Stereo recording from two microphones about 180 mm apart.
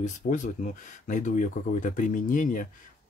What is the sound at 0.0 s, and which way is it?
Speech, 45° left (ahead or behind).